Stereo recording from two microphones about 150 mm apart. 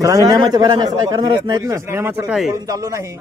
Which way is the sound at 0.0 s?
25° right (ahead or behind).